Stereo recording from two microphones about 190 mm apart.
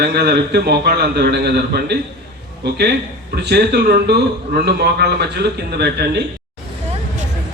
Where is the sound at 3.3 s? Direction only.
60° right (ahead or behind).